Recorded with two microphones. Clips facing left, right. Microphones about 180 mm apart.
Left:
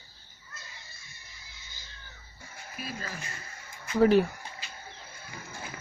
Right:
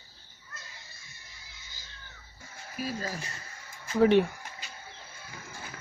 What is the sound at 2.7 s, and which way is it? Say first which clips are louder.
Speech: right 5 dB; 35° right (ahead or behind).